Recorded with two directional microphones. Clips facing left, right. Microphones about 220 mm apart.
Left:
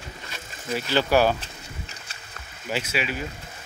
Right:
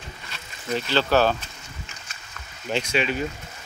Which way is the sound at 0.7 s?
10° left (ahead or behind).